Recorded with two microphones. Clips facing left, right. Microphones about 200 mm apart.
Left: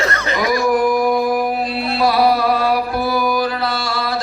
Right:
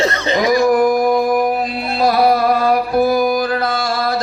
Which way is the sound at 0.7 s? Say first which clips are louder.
Right 2 dB; 45° right (ahead or behind).